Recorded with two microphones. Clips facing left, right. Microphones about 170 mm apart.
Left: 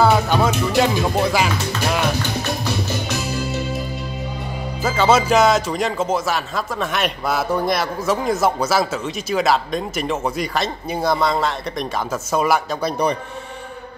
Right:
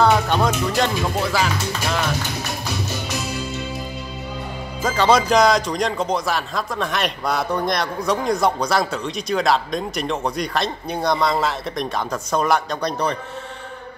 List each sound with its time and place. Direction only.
0.0 s music: 5° left (ahead or behind)
1.1 s speech: 15° left (ahead or behind)
4.8 s speech: 5° left (ahead or behind)